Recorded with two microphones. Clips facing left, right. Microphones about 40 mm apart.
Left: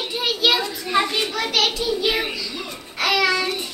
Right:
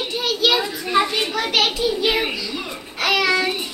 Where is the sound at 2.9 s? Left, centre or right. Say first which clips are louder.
Right 1 dB; centre.